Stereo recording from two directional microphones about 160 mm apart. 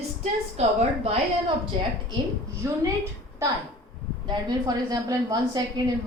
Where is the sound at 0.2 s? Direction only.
40° right (ahead or behind).